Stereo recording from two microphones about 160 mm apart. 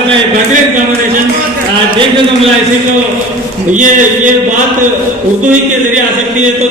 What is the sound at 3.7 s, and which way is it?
Speech, 50° right (ahead or behind).